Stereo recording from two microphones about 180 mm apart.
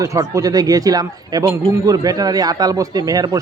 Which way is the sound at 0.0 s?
15° right (ahead or behind).